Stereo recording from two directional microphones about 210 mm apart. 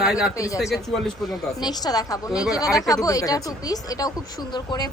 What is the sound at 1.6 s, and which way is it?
Speech, 20° left (ahead or behind).